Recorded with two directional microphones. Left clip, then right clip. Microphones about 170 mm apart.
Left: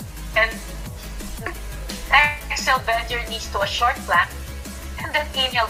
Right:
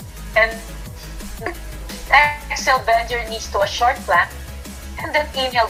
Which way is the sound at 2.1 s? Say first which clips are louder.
Right 3 dB; 50° right (ahead or behind).